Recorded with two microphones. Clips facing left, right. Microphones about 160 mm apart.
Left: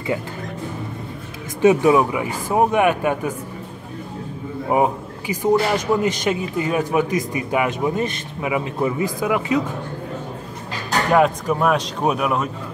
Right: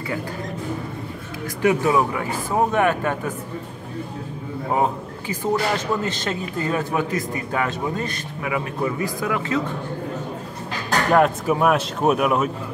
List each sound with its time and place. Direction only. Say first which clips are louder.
1.6 s speech: left 4 dB; 20° left (ahead or behind)
4.6 s speech: left 3 dB; 15° left (ahead or behind)
11.1 s speech: left 1 dB; centre (ahead or behind)